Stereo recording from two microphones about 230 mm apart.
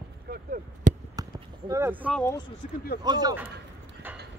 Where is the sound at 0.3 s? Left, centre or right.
Right.